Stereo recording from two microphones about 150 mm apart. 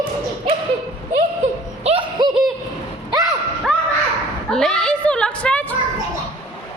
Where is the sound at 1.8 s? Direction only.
45° right (ahead or behind).